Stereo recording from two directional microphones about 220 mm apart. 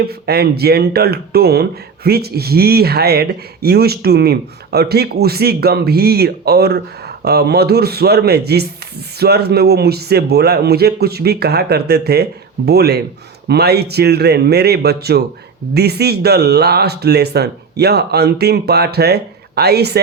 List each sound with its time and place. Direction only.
0.0 s speech: 45° right (ahead or behind)